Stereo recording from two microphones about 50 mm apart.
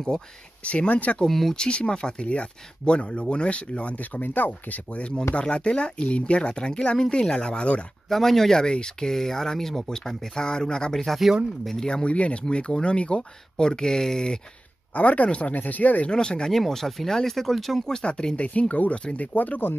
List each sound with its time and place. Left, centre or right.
0.1 s speech: centre
0.7 s speech: left
1.2 s speech: centre
1.6 s speech: centre; by 5.0 s left
5.3 s speech: left
8.1 s speech: centre
11.9 s speech: left
15.0 s speech: left
16.1 s speech: centre
16.5 s speech: centre
17.8 s speech: centre; by 19.6 s left